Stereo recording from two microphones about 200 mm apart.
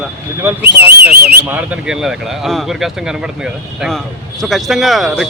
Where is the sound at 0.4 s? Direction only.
10° right (ahead or behind).